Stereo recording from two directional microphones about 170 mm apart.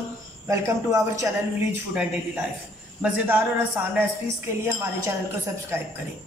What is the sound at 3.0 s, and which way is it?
Speech, 10° right (ahead or behind).